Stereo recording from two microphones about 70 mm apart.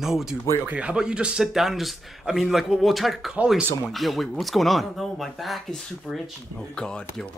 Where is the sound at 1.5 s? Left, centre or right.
Centre.